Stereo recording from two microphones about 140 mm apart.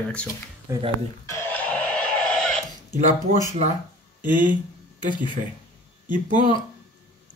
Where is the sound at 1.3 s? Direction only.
15° left (ahead or behind).